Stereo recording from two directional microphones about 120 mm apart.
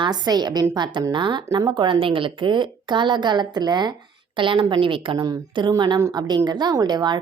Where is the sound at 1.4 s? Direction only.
30° right (ahead or behind).